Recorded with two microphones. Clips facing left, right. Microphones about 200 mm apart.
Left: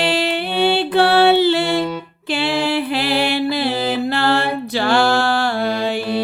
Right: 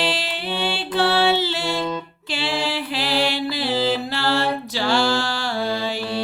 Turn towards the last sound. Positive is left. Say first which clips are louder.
# left 4 dB
turn(degrees=55)  # may be behind; listen again after turning